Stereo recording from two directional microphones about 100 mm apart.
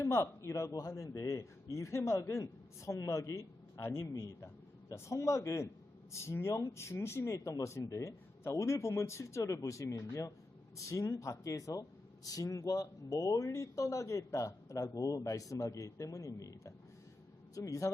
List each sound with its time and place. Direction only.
0.0 s speech: 30° left (ahead or behind)